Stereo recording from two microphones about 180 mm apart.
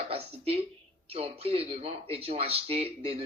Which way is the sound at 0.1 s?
35° right (ahead or behind).